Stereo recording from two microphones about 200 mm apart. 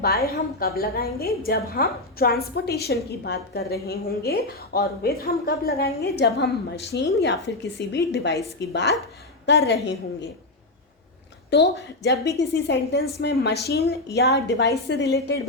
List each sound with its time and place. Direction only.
0.0 s a woman's voice: 50° left (ahead or behind)
11.5 s a woman's voice: 60° left (ahead or behind)